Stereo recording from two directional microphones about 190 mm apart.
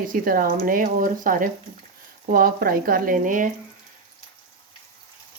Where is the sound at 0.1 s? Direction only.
50° right (ahead or behind).